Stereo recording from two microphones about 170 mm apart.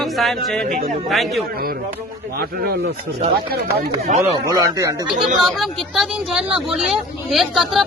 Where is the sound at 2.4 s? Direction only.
65° right (ahead or behind).